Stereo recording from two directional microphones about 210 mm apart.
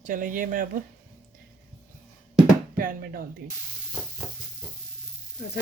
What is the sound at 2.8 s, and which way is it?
Speech, 40° right (ahead or behind).